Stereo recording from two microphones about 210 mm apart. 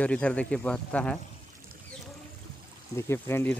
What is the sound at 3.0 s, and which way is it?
Speech, 10° left (ahead or behind).